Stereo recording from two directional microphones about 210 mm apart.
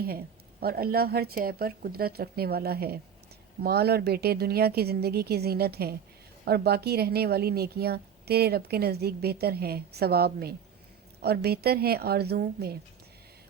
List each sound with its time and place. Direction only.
0.6 s a woman's voice: 45° right (ahead or behind)